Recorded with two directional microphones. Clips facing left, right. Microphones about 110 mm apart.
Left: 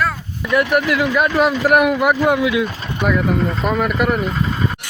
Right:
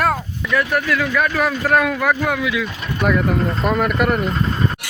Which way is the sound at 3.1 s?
Centre (ahead or behind).